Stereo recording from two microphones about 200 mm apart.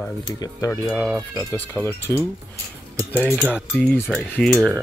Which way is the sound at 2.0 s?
15° left (ahead or behind).